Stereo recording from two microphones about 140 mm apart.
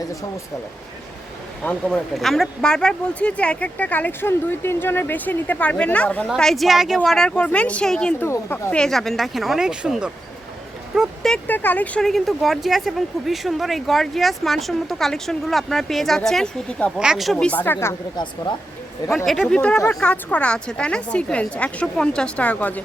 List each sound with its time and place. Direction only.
1.6 s speech: 5° left (ahead or behind)
8.2 s speech: 15° left (ahead or behind)
8.7 s speech: 5° left (ahead or behind)
17.3 s speech: 10° left (ahead or behind)
19.1 s speech: centre (ahead or behind)